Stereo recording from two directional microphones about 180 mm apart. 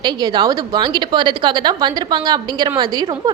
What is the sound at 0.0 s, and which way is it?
A woman's voice, 20° right (ahead or behind).